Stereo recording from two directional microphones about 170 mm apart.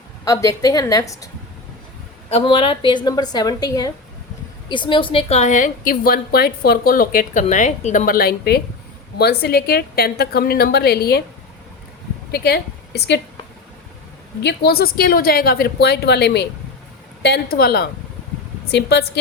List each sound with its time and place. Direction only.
0.3 s a woman's voice: 20° left (ahead or behind)
2.3 s a woman's voice: 30° left (ahead or behind); by 11.2 s 70° left (ahead or behind)
12.3 s speech: 70° left (ahead or behind)
14.4 s a woman's voice: 65° left (ahead or behind)
18.7 s a woman's voice: 75° left (ahead or behind)